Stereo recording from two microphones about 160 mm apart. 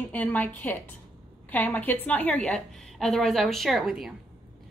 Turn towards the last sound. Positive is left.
turn(degrees=0)  # may be behind; listen again after turning